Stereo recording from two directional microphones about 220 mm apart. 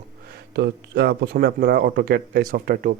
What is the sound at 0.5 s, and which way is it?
Speech, 45° right (ahead or behind).